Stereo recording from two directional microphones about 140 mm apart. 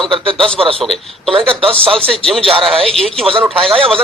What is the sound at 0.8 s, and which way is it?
Speech, centre (ahead or behind).